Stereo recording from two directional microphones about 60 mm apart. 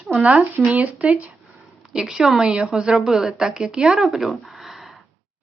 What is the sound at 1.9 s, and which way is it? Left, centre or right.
A woman's voice, centre.